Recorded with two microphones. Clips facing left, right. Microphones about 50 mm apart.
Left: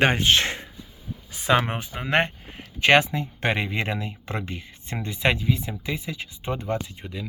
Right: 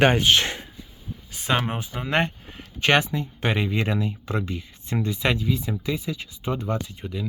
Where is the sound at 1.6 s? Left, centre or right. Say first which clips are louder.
Left 2 dB; left.